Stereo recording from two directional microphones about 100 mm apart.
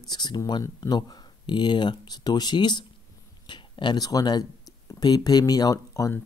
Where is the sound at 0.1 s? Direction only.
45° left (ahead or behind).